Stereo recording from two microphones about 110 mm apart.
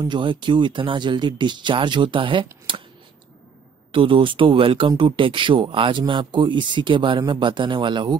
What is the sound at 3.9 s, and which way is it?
Speech, 50° right (ahead or behind).